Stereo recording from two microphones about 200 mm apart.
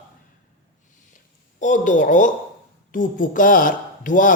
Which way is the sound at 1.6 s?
40° left (ahead or behind).